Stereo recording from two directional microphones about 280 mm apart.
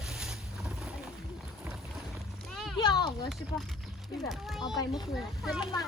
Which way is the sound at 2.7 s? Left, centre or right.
Centre.